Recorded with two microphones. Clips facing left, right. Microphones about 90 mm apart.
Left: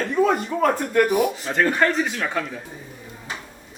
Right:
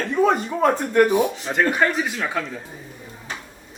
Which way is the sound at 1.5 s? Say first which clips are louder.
Even; 10° right (ahead or behind).